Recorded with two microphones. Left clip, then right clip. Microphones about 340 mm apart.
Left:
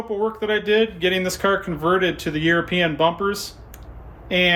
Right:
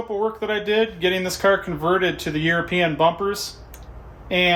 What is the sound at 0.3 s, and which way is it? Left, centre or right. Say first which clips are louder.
Speech: left 3 dB; centre.